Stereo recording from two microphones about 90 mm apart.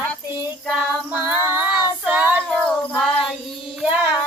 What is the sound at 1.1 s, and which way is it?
Child singing, 20° right (ahead or behind).